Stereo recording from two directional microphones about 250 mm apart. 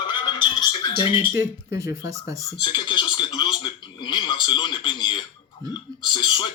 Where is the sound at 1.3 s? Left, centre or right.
Centre.